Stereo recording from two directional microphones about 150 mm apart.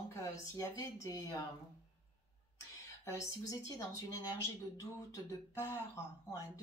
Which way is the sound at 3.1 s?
20° left (ahead or behind).